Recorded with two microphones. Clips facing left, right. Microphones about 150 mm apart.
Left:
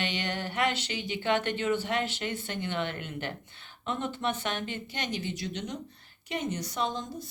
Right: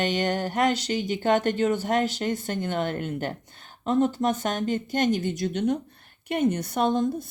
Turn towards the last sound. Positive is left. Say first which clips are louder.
# right 9 dB
turn(degrees=-55)  # may be behind; listen again after turning